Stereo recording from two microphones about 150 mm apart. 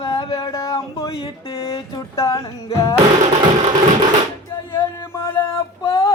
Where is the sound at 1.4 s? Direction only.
40° left (ahead or behind).